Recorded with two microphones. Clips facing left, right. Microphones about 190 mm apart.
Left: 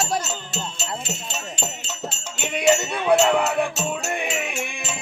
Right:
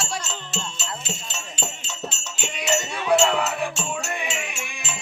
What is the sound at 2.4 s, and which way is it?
Music, 55° left (ahead or behind).